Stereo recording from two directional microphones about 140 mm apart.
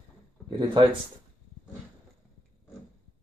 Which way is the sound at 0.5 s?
35° right (ahead or behind).